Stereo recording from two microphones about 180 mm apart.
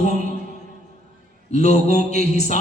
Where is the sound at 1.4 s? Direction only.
40° left (ahead or behind).